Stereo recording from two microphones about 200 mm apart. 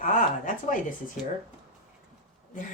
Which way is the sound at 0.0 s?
40° left (ahead or behind).